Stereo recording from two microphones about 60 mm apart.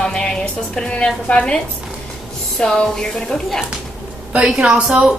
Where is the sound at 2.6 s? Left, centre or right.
Centre.